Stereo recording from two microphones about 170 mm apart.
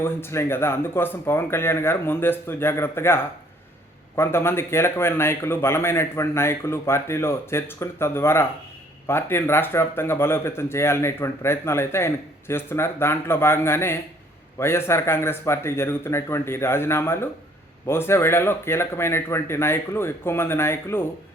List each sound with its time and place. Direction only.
0.0 s speech: 15° left (ahead or behind)